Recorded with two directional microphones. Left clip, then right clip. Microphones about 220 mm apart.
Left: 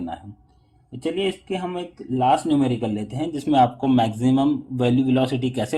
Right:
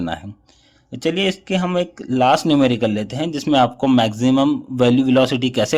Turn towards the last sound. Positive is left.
turn(degrees=-35)  # may be behind; listen again after turning